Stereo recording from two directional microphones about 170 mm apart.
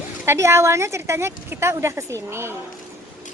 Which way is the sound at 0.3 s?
15° right (ahead or behind).